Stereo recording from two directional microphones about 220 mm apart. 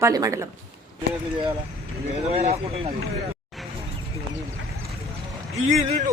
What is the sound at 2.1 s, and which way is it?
Speech, 30° right (ahead or behind).